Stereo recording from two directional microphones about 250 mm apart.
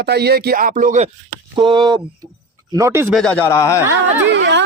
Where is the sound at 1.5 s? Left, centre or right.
Centre.